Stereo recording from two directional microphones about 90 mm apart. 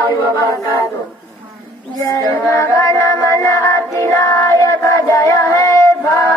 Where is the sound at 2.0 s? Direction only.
35° left (ahead or behind).